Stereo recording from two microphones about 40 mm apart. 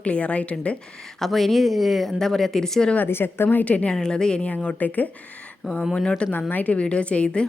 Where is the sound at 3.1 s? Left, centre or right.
Left.